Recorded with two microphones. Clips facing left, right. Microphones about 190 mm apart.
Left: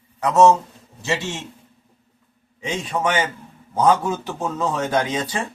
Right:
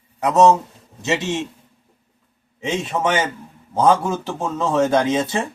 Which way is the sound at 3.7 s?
25° right (ahead or behind).